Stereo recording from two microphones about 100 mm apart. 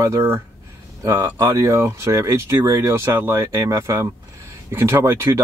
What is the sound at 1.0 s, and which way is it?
Speech, 35° right (ahead or behind).